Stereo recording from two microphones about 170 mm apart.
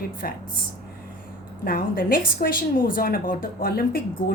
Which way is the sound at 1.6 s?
60° left (ahead or behind).